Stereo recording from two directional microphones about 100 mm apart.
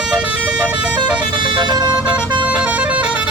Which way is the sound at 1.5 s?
45° right (ahead or behind).